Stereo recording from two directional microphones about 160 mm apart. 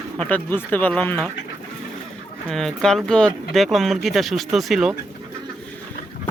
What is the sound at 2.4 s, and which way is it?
Speech, 5° left (ahead or behind).